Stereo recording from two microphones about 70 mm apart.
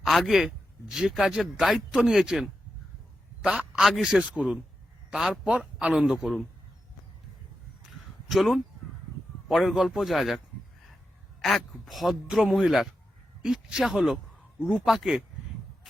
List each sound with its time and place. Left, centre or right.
0.0 s speech: centre
3.4 s a man's voice: centre
3.8 s a man's voice: centre
8.3 s a man's voice: centre